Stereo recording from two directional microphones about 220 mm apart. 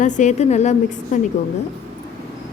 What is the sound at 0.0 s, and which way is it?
A woman's voice, 35° left (ahead or behind).